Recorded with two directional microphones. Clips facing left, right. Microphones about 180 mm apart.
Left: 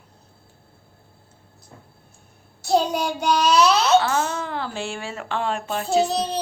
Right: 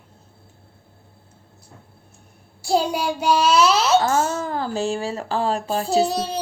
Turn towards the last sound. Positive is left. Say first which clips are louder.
# right 1 dB
turn(degrees=-35)  # may be behind; listen again after turning